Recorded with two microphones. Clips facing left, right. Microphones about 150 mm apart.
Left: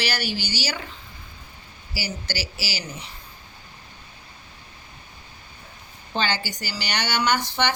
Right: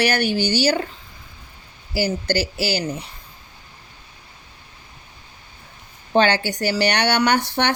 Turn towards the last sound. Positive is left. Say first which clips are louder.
# right 4 dB
turn(degrees=-60)  # may be behind; listen again after turning